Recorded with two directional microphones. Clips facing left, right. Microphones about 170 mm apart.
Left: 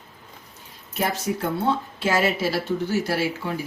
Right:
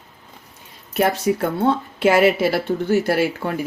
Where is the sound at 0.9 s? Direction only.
60° right (ahead or behind).